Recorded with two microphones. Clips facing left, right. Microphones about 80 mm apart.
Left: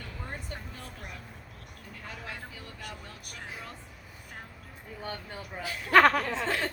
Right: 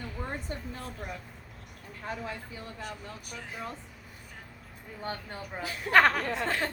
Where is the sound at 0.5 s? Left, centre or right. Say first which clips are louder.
Right 4 dB; right.